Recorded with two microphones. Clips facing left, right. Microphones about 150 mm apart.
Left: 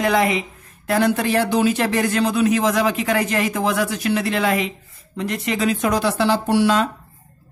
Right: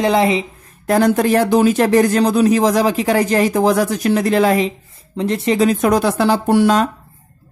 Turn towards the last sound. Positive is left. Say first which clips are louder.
# right 4 dB
turn(degrees=-45)  # may be behind; listen again after turning